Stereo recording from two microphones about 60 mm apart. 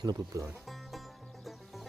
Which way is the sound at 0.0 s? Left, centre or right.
Right.